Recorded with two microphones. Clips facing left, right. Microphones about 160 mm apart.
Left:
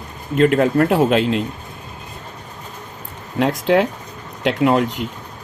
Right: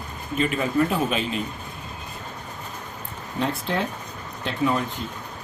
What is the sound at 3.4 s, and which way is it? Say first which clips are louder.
Speech: left 10 dB; 85° left.